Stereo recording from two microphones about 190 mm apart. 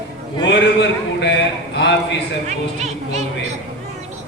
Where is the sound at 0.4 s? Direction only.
70° left (ahead or behind).